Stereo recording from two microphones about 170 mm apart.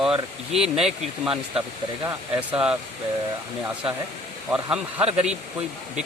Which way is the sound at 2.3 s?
5° right (ahead or behind).